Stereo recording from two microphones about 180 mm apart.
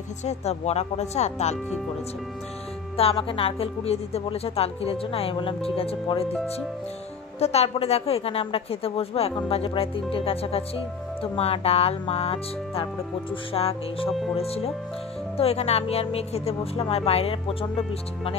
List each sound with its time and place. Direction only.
0.2 s speech: 35° left (ahead or behind)
3.0 s speech: 30° left (ahead or behind)